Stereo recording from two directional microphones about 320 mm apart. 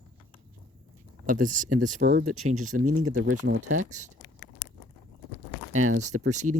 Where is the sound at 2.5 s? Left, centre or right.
Right.